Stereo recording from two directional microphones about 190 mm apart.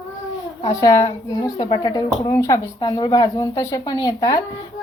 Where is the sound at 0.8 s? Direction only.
20° left (ahead or behind).